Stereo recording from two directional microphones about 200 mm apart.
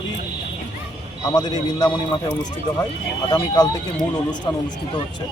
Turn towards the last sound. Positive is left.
turn(degrees=20)  # may be behind; listen again after turning